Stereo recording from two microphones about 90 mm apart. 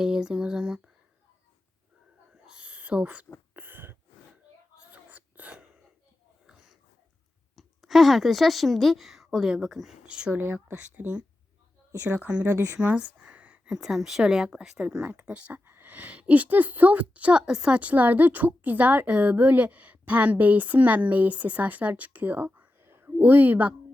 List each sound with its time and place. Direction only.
0.0 s speech: 10° right (ahead or behind)
2.5 s whispering: 15° right (ahead or behind)
3.5 s a sound: 20° right (ahead or behind)
6.5 s wheeze: 5° right (ahead or behind)
7.5 s a woman's voice: centre (ahead or behind)
10.3 s speech: 20° right (ahead or behind)
12.8 s a sound: 15° right (ahead or behind)
13.7 s speech: 5° right (ahead or behind)